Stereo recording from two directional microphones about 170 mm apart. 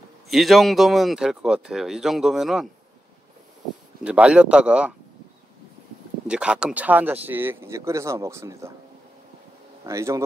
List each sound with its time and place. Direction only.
0.3 s speech: centre (ahead or behind)
4.0 s speech: 5° right (ahead or behind)
6.2 s speech: 5° right (ahead or behind)
9.8 s speech: 20° right (ahead or behind)